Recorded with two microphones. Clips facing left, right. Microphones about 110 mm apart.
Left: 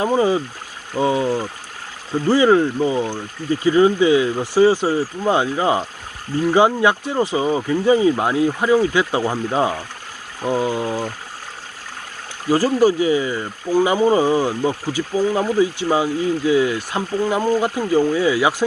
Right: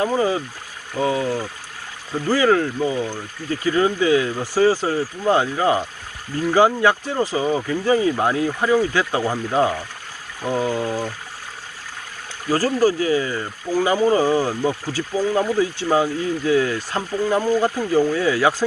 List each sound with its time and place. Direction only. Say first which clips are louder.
0.0 s speech: left 3 dB; 20° left (ahead or behind)
12.5 s speech: left 3 dB; 20° left (ahead or behind)